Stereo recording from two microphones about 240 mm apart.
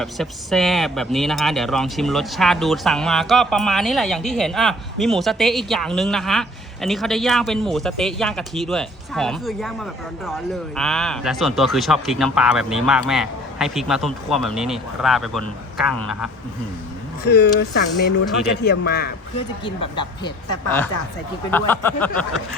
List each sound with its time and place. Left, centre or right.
0.0 s a man's voice: centre
17.2 s speech: left
19.6 s speech: centre
20.7 s a sound: centre